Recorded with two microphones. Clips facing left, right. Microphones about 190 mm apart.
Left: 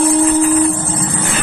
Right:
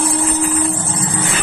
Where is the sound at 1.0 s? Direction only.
55° left (ahead or behind).